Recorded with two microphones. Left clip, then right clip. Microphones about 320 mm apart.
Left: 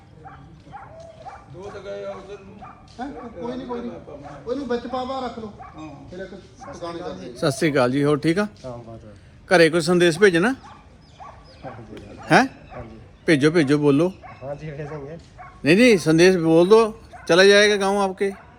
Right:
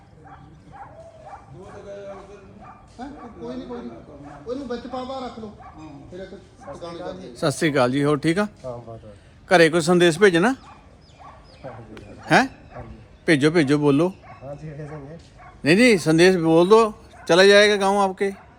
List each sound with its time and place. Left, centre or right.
3.0 s speech: left
6.6 s speech: left
7.3 s a man's voice: centre
12.3 s speech: centre
15.6 s a man's voice: centre